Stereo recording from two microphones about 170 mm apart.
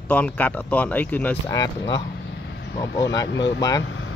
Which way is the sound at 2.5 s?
90° left.